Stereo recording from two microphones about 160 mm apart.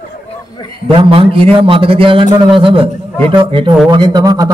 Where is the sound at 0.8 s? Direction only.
35° right (ahead or behind).